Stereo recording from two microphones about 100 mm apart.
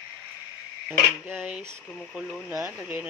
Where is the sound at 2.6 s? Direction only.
15° right (ahead or behind).